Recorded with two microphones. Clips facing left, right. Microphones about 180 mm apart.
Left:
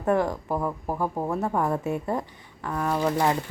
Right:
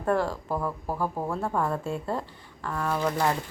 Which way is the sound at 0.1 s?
15° left (ahead or behind).